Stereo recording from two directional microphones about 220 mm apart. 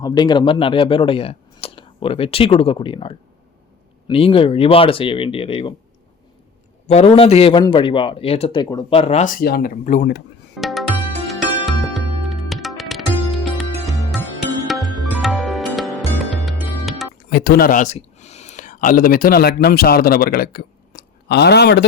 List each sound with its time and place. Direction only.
0.0 s a man's voice: 20° left (ahead or behind)
6.8 s a man's voice: 30° left (ahead or behind)
10.6 s music: centre (ahead or behind)
17.2 s speech: 45° left (ahead or behind)